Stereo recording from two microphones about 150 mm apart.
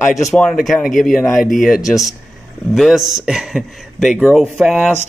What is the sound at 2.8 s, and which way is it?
Speech, centre (ahead or behind).